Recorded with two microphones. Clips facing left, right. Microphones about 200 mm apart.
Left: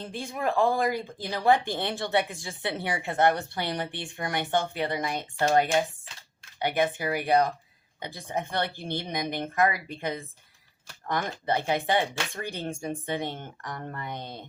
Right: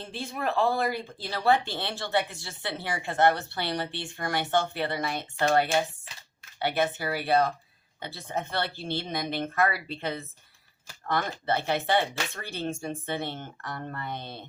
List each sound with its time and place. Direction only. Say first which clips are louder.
0.1 s speech: left 1 dB; 15° left (ahead or behind)